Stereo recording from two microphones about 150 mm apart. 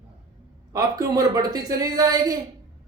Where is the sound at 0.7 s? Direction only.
25° right (ahead or behind).